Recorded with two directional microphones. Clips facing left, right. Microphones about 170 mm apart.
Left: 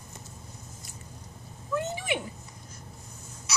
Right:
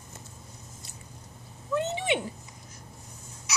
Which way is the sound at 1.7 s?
25° right (ahead or behind).